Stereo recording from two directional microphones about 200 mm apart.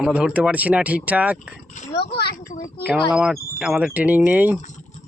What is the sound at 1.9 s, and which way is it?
Speech, 55° left (ahead or behind).